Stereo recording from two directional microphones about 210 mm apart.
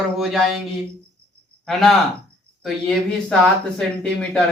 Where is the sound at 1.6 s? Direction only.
Centre (ahead or behind).